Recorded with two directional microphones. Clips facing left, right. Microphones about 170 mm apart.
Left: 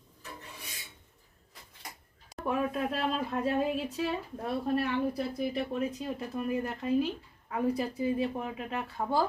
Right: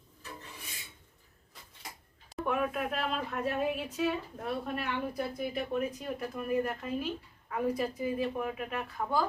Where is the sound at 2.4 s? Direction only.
30° left (ahead or behind).